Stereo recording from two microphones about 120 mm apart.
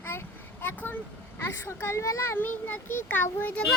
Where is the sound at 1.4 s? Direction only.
20° left (ahead or behind).